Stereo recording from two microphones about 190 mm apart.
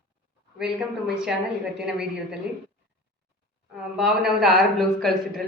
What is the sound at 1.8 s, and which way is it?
Speech, 5° right (ahead or behind).